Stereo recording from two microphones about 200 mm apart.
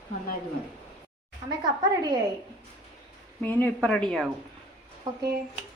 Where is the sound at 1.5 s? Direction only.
20° right (ahead or behind).